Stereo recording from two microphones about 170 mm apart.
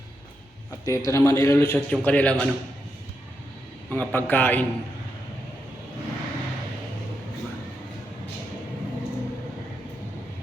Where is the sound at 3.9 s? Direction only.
10° left (ahead or behind).